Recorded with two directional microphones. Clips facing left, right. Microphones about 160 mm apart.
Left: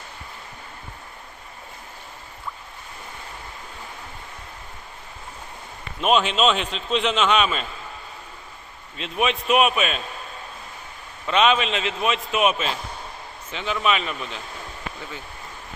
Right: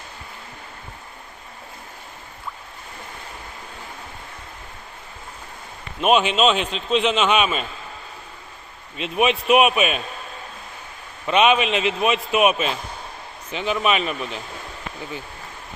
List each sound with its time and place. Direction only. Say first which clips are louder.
6.0 s a man's voice: right 2 dB; 5° right (ahead or behind)
9.0 s a man's voice: right 4 dB; 10° right (ahead or behind)
11.3 s a man's voice: right 2 dB; 10° right (ahead or behind)